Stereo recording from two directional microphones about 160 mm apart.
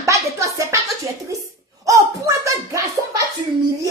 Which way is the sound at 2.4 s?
20° right (ahead or behind).